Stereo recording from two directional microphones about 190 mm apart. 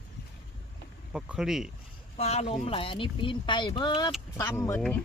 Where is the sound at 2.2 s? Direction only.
35° left (ahead or behind); by 4.8 s 15° left (ahead or behind).